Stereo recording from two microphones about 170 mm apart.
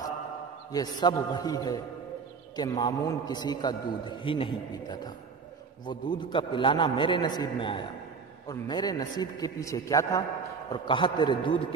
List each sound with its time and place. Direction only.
0.7 s a man's voice: 20° left (ahead or behind)